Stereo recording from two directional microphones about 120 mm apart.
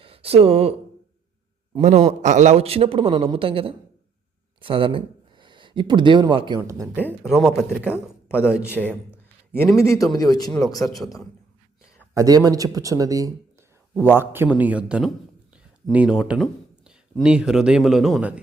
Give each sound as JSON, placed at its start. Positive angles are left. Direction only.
{"t": 0.0, "sound": "speech", "side_deg": -50}
{"t": 1.8, "sound": "a man's voice", "side_deg": -70}
{"t": 6.6, "sound": "speech", "side_deg": -25}
{"t": 7.2, "sound": "a man's voice", "side_deg": -5}
{"t": 9.7, "sound": "a man's voice", "side_deg": 25}
{"t": 10.9, "sound": "speech", "side_deg": 0}
{"t": 12.1, "sound": "speech", "side_deg": -30}
{"t": 14.0, "sound": "a man's voice", "side_deg": -20}